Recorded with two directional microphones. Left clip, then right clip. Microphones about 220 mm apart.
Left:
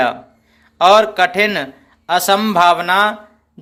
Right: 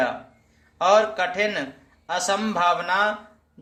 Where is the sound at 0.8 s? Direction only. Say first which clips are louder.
Left 8 dB; 50° left (ahead or behind).